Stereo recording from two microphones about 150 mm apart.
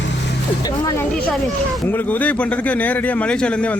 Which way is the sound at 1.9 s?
10° left (ahead or behind).